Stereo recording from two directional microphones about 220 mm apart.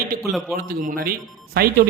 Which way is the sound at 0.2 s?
Centre (ahead or behind).